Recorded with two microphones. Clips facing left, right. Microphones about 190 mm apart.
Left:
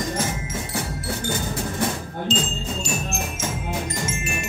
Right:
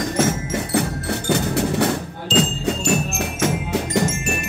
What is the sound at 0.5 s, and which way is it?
Music, 70° right (ahead or behind).